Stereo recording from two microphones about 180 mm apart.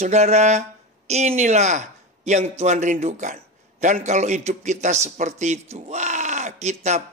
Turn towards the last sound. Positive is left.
turn(degrees=-35)  # may be behind; listen again after turning